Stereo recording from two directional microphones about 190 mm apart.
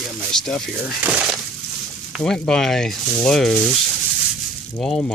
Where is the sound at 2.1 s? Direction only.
5° left (ahead or behind).